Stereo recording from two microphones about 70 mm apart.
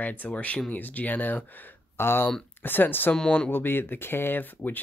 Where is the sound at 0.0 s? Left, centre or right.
Left.